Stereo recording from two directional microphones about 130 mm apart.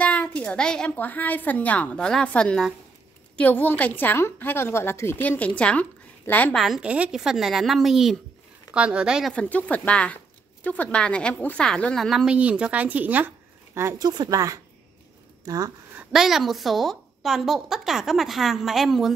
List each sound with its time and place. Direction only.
0.0 s speech: 10° left (ahead or behind)
6.5 s a woman's voice: centre (ahead or behind)
9.3 s speech: 10° left (ahead or behind); by 14.0 s 20° right (ahead or behind)
14.0 s speech: 35° right (ahead or behind)
16.0 s a woman's voice: centre (ahead or behind)